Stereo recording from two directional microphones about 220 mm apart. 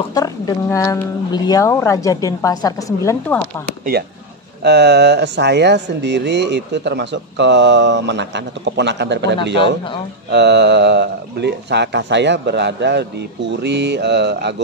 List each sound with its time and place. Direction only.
0.1 s speech: 15° left (ahead or behind)
4.6 s speech: 50° right (ahead or behind)